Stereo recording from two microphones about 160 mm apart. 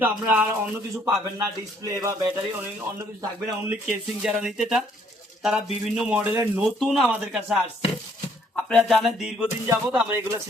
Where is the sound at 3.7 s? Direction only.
5° right (ahead or behind).